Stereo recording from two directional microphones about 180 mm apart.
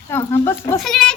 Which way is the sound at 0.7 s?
Centre (ahead or behind).